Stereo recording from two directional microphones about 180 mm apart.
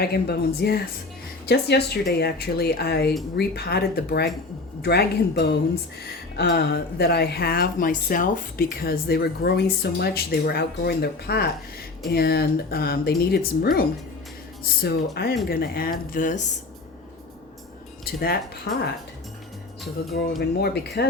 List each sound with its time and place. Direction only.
0.0 s speech: 60° left (ahead or behind); by 16.5 s 45° left (ahead or behind)
18.0 s speech: 60° left (ahead or behind)
18.7 s speech: 75° left (ahead or behind)
20.6 s speech: 65° left (ahead or behind)